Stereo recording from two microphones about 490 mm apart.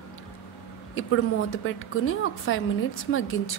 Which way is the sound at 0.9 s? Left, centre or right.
Left.